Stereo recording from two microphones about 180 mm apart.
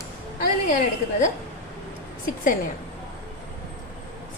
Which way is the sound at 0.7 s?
45° left (ahead or behind).